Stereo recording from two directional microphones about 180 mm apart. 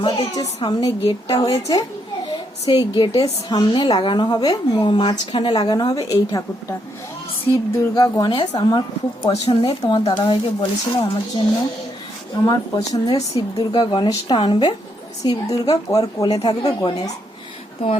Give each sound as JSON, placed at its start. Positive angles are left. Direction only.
{"t": 0.0, "sound": "a woman's voice", "side_deg": 30}
{"t": 12.5, "sound": "a woman's voice", "side_deg": 20}